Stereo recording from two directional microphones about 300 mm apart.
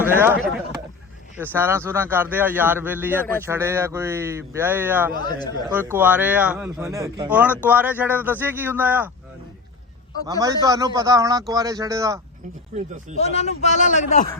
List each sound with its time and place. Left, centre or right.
0.0 s a man's voice: centre
5.2 s speech: centre
5.6 s a man's voice: centre
10.2 s a man's voice: centre
12.7 s speech: right
13.1 s a man's voice: left